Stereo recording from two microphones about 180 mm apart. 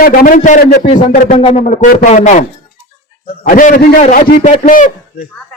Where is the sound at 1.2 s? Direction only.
35° left (ahead or behind).